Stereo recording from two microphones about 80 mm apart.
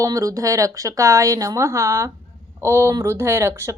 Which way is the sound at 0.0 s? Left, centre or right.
Right.